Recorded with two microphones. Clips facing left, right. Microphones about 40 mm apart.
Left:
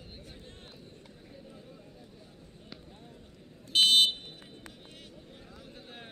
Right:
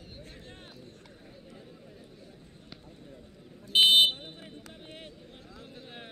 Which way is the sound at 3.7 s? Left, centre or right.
Right.